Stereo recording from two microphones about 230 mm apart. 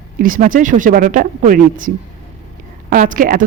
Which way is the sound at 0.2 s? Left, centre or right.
Right.